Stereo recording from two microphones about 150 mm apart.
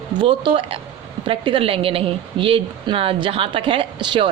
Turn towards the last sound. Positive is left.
turn(degrees=-30)  # may be behind; listen again after turning